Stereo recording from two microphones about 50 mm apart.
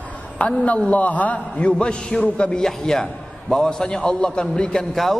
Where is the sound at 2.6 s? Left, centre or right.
Centre.